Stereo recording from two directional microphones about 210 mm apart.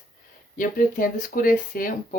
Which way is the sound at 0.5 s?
40° left (ahead or behind).